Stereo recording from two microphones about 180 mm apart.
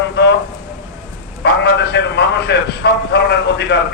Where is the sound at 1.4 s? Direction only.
70° left (ahead or behind).